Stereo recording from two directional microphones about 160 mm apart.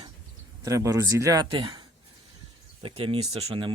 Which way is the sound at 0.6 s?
20° right (ahead or behind).